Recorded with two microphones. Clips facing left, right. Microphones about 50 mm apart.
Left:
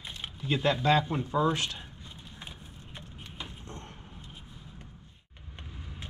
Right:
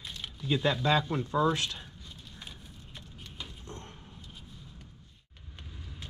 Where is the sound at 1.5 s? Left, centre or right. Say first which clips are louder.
Even; left.